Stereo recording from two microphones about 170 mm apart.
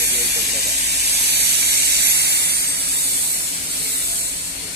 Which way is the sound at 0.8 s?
75° right (ahead or behind).